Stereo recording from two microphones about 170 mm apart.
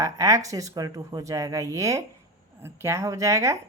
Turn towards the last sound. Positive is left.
turn(degrees=-20)  # may be behind; listen again after turning